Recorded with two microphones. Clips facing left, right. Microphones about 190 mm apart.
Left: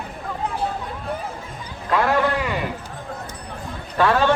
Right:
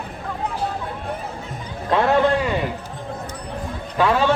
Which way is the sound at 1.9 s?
25° right (ahead or behind).